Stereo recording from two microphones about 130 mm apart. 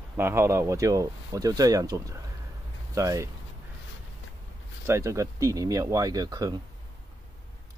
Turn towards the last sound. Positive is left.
turn(degrees=-30)  # may be behind; listen again after turning